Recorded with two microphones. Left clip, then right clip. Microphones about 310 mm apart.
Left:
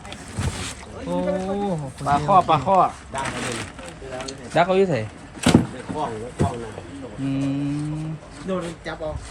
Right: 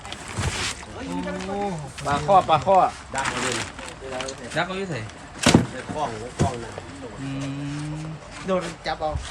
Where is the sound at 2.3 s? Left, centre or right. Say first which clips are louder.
Even; left.